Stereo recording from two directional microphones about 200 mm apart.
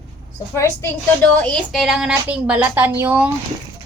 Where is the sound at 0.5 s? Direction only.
15° left (ahead or behind).